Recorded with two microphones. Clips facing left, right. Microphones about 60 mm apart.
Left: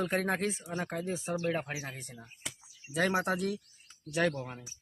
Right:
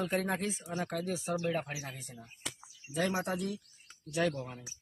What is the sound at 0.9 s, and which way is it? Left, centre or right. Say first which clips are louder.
Speech: even; left.